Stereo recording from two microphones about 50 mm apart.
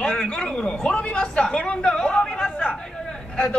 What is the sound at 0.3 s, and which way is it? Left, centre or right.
Speech, centre.